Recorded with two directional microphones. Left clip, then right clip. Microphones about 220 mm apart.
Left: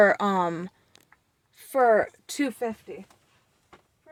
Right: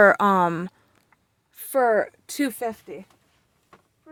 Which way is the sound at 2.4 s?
30° right (ahead or behind).